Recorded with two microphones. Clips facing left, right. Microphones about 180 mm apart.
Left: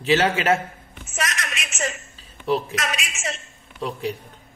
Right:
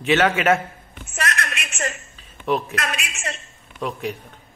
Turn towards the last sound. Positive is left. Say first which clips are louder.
# even
turn(degrees=30)  # may be behind; listen again after turning